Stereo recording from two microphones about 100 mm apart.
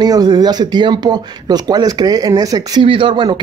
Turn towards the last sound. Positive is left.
turn(degrees=-50)  # may be behind; listen again after turning